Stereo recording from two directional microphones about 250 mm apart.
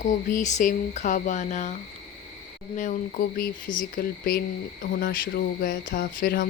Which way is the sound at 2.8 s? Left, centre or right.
Left.